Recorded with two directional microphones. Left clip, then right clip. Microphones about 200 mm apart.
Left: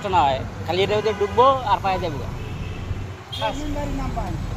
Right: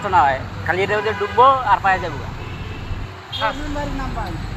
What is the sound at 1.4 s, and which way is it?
Speech, 5° right (ahead or behind).